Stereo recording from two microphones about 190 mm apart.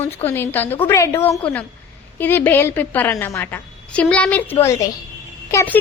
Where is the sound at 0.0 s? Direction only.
10° left (ahead or behind).